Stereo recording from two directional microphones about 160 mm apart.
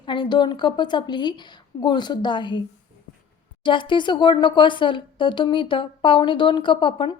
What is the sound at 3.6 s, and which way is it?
Speech, 30° left (ahead or behind).